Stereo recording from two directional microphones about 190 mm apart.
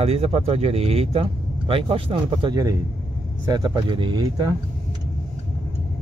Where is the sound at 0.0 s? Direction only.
30° right (ahead or behind).